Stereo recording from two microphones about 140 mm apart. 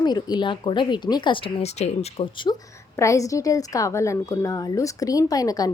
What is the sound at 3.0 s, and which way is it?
A woman's voice, 25° left (ahead or behind).